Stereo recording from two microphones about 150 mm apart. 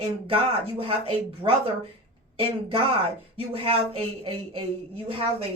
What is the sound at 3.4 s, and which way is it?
Speech, 40° right (ahead or behind).